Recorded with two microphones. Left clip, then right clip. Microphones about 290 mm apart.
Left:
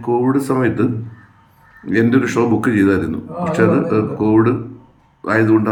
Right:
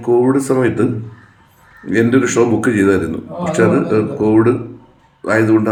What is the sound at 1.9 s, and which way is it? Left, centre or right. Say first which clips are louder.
A man's voice: right 2 dB; centre.